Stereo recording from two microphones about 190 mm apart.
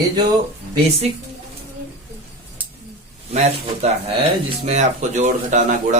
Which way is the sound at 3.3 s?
35° right (ahead or behind).